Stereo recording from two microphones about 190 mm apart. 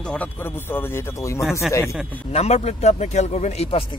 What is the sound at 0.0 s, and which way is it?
Speech, 5° left (ahead or behind).